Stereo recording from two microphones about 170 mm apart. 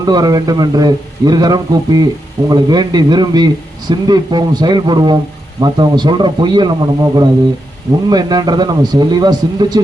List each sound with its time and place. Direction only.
0.0 s a man's voice: 20° right (ahead or behind)